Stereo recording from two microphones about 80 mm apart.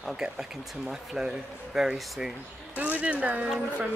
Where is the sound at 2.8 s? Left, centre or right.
Centre.